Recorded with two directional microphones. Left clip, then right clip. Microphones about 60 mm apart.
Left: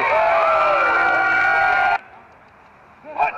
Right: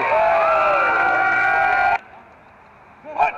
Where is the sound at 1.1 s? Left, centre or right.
Left.